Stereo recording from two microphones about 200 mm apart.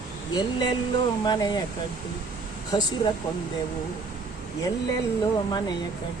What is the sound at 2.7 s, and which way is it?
Speech, 20° left (ahead or behind).